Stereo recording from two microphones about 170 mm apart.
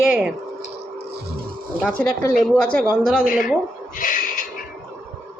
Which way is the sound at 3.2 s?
55° left (ahead or behind).